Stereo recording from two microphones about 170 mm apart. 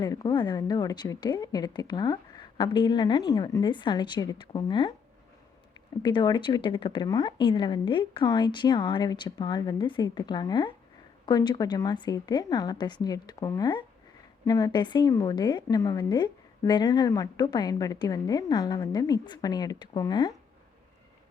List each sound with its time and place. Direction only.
0.0 s a woman's voice: 25° left (ahead or behind)
6.0 s a woman's voice: 25° left (ahead or behind)